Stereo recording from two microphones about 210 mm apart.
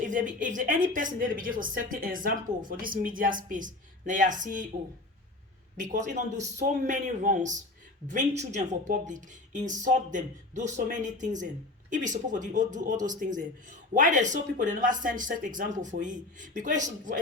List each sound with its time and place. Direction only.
0.0 s a woman's voice: 40° right (ahead or behind)
5.7 s a woman's voice: 35° right (ahead or behind)